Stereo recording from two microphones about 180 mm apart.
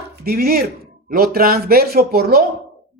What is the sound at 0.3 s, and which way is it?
A man's voice, 60° right (ahead or behind).